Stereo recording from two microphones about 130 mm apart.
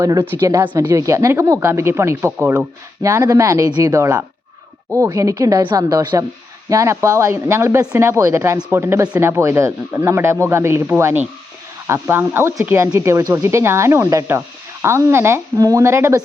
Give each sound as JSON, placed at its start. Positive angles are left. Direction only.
{"t": 0.0, "sound": "speech", "side_deg": -25}
{"t": 3.0, "sound": "speech", "side_deg": -25}